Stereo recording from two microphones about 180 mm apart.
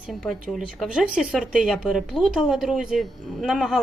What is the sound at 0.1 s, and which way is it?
Speech, centre (ahead or behind).